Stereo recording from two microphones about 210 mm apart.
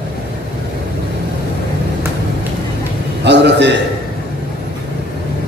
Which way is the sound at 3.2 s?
55° right (ahead or behind).